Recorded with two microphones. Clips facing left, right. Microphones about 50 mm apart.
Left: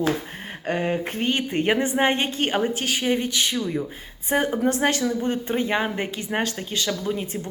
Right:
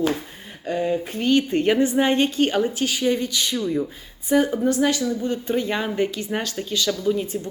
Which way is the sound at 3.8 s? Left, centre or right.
Left.